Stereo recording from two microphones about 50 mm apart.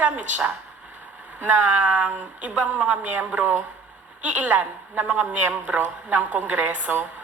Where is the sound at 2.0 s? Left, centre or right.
Right.